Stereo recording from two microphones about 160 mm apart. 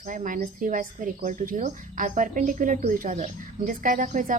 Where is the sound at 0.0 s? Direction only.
55° right (ahead or behind).